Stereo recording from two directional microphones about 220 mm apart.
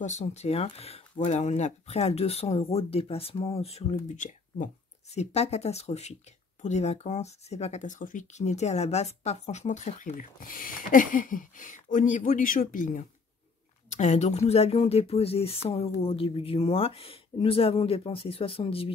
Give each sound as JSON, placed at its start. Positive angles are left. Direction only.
{"t": 0.0, "sound": "speech", "side_deg": 30}